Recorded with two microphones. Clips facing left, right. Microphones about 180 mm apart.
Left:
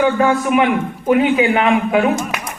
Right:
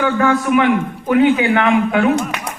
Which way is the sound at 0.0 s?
20° left (ahead or behind).